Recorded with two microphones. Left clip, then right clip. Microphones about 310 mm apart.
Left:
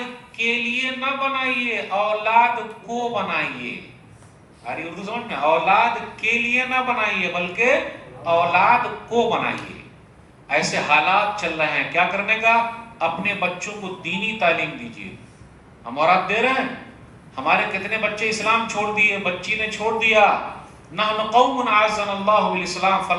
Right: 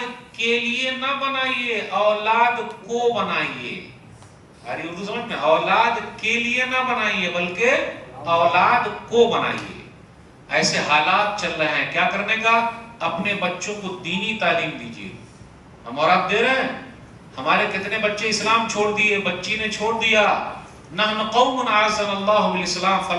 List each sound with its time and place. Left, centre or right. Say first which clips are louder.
0.3 s a man's voice: even; centre
4.9 s a man's voice: left 1 dB; centre